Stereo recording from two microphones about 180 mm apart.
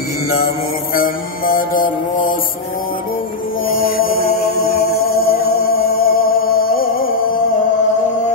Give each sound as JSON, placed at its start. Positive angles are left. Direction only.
{"t": 0.9, "sound": "mantra", "side_deg": 55}
{"t": 3.6, "sound": "music", "side_deg": 55}